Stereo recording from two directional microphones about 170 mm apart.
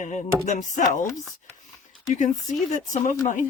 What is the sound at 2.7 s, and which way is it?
Speech, 45° left (ahead or behind).